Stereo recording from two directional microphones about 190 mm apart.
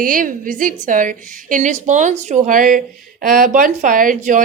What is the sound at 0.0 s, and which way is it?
A woman's voice, 45° right (ahead or behind).